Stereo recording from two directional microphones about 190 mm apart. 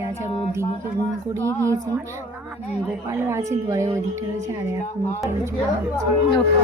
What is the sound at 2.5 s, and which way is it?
Speech, 10° right (ahead or behind).